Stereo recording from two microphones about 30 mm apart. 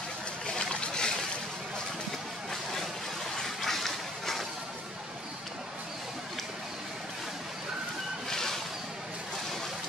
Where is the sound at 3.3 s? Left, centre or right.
Centre.